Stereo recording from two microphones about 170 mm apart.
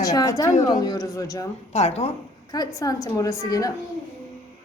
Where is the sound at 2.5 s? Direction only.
20° left (ahead or behind).